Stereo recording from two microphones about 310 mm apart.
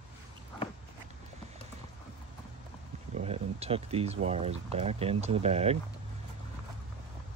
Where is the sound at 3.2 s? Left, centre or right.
Centre.